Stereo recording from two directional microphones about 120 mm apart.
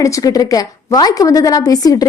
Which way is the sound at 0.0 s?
25° left (ahead or behind).